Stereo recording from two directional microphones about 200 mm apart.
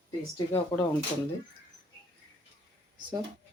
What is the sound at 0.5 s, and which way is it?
Speech, 20° left (ahead or behind).